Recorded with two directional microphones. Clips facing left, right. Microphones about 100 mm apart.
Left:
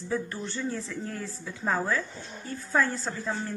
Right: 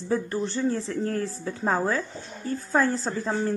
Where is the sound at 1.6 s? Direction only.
35° right (ahead or behind).